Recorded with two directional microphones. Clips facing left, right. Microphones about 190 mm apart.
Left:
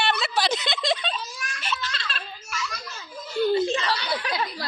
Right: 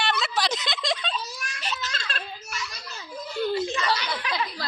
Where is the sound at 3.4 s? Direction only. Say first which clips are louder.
Left 5 dB; 30° left (ahead or behind).